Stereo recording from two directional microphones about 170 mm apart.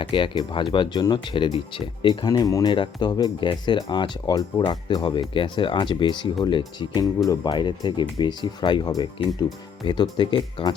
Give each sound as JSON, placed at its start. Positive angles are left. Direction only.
{"t": 0.0, "sound": "speech", "side_deg": 30}